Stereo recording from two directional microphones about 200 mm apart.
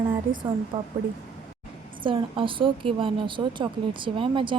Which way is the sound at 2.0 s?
25° right (ahead or behind).